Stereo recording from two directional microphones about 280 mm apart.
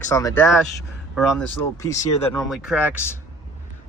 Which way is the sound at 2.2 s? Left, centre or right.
Left.